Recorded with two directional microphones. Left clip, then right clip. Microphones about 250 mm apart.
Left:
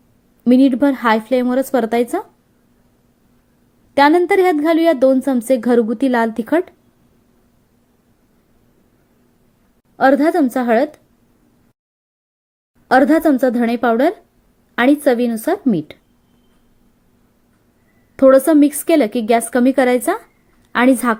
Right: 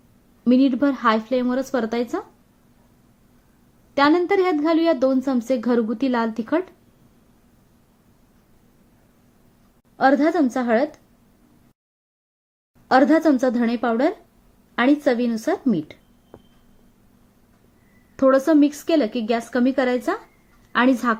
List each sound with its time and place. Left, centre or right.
0.4 s speech: centre
3.9 s speech: centre
10.0 s speech: centre
12.9 s speech: centre
18.2 s speech: centre